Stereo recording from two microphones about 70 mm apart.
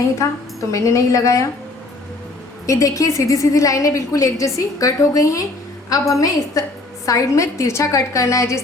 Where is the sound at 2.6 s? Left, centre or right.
Left.